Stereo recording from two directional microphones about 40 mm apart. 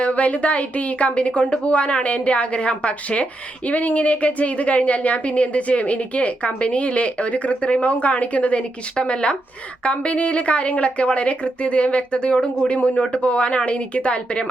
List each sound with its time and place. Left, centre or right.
0.0 s speech: left